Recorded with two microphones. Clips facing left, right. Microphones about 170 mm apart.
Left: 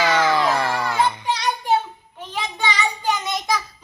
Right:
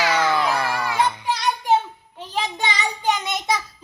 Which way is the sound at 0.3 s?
5° right (ahead or behind).